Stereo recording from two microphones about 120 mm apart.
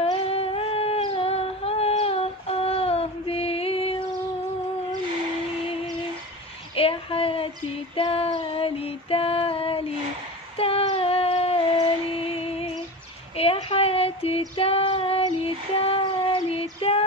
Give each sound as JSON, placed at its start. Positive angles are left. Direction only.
{"t": 0.0, "sound": "a sound", "side_deg": 55}
{"t": 6.7, "sound": "a woman's voice", "side_deg": 50}
{"t": 7.9, "sound": "female singing", "side_deg": 50}
{"t": 12.2, "sound": "music", "side_deg": 55}
{"t": 13.4, "sound": "a sound", "side_deg": 55}
{"t": 14.6, "sound": "female singing", "side_deg": 55}